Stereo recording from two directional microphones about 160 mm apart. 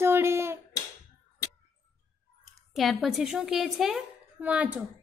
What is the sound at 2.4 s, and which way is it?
A woman's voice, centre (ahead or behind).